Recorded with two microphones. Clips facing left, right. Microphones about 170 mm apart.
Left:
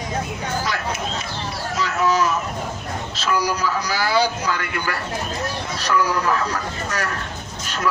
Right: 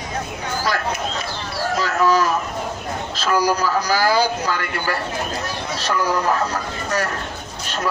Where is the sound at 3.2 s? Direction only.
40° right (ahead or behind).